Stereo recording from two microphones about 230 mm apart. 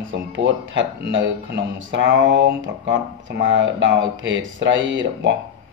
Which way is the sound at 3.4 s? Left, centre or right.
Right.